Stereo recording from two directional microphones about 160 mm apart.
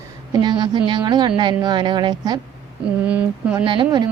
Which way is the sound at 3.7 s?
30° right (ahead or behind).